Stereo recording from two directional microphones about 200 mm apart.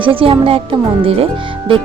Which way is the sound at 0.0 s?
25° right (ahead or behind).